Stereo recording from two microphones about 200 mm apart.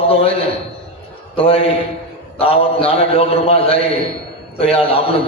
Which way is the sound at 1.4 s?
30° left (ahead or behind).